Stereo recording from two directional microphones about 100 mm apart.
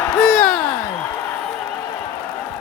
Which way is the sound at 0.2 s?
5° left (ahead or behind).